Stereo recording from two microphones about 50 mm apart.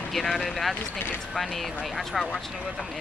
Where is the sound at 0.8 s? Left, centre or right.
Left.